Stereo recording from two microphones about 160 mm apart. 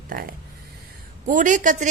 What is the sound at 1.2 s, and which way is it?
Speech, 55° right (ahead or behind).